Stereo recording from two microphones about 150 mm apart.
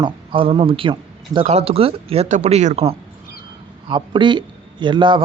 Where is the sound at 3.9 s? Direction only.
30° right (ahead or behind).